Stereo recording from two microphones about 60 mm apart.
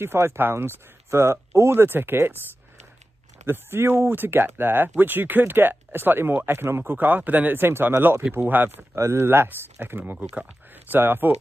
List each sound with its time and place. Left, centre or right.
0.0 s speech: right
3.4 s speech: right
4.1 s speech: right